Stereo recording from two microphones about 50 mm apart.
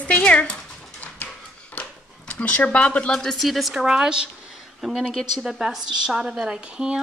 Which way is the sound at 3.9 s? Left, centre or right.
Centre.